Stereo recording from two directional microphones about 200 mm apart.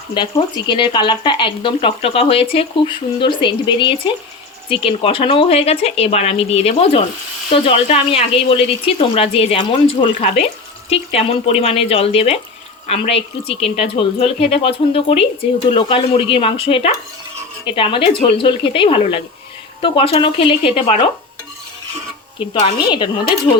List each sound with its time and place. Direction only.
0.1 s speech: 25° left (ahead or behind)
22.4 s speech: 25° left (ahead or behind)